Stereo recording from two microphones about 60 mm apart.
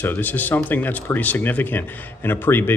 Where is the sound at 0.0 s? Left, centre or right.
Left.